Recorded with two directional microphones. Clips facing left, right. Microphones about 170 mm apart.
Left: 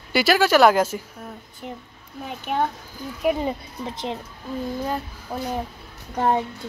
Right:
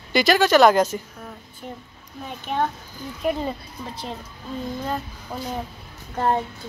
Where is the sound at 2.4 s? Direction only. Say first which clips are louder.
Even; 10° left (ahead or behind).